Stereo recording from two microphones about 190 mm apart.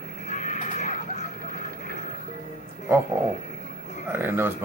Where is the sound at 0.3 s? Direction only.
40° left (ahead or behind).